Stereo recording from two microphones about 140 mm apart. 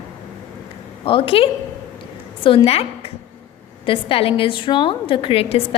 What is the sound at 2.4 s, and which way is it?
Speech, 40° left (ahead or behind).